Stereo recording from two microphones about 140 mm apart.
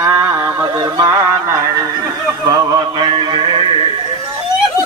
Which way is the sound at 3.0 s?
35° right (ahead or behind).